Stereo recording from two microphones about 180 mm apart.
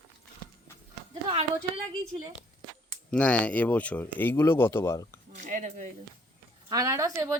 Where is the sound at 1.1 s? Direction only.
30° right (ahead or behind).